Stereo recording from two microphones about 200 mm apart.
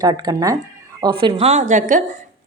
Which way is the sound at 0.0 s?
20° right (ahead or behind).